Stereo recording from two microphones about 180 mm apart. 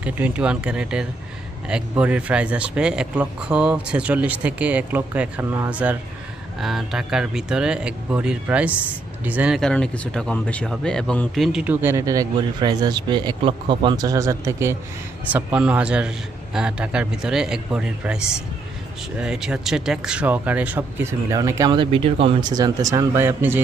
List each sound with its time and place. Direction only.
0.0 s speech: 5° right (ahead or behind)